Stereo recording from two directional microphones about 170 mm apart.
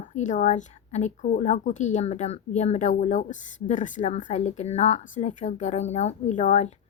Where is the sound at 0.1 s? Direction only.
45° left (ahead or behind).